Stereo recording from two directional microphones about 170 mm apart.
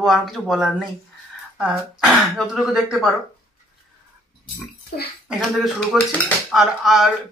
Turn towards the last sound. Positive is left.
turn(degrees=0)  # may be behind; listen again after turning